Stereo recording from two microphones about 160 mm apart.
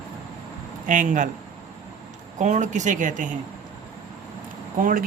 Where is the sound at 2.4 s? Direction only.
50° right (ahead or behind).